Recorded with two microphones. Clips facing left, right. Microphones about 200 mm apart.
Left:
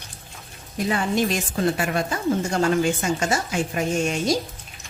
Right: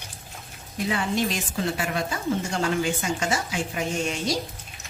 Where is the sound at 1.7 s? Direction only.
45° left (ahead or behind).